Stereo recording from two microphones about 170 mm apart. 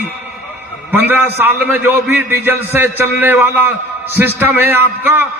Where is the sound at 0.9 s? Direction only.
10° right (ahead or behind).